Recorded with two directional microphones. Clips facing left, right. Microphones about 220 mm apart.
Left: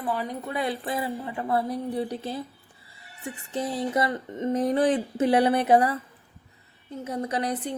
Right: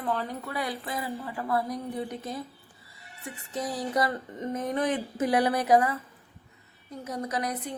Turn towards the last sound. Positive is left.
turn(degrees=30)  # may be behind; listen again after turning